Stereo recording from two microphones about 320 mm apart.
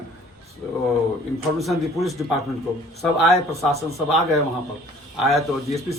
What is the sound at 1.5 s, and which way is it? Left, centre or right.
Speech, centre.